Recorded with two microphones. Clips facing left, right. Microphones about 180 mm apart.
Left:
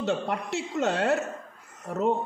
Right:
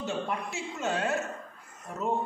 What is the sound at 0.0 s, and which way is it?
A man's voice, 70° left (ahead or behind).